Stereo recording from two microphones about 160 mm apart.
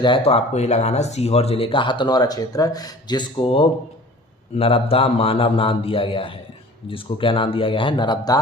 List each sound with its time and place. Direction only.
0.0 s speech: 35° left (ahead or behind)